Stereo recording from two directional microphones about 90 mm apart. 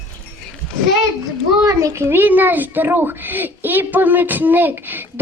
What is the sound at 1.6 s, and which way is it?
Speech, 35° right (ahead or behind).